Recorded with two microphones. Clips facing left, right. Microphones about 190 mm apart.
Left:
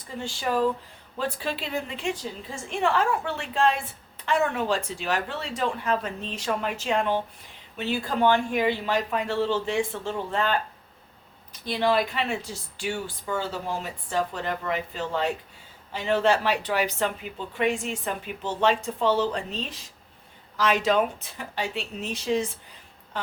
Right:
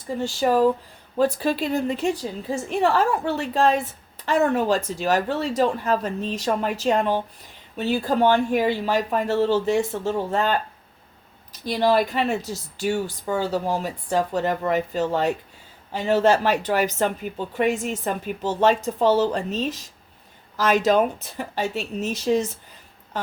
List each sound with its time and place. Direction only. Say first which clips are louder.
0.2 s speech: right 6 dB; 40° right (ahead or behind)
11.7 s speech: right 4 dB; 40° right (ahead or behind)